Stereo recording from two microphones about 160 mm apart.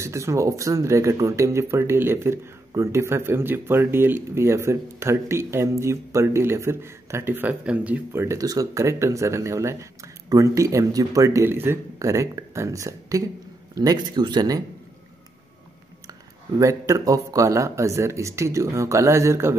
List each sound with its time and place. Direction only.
0.0 s speech: 20° right (ahead or behind)
16.5 s speech: 20° right (ahead or behind)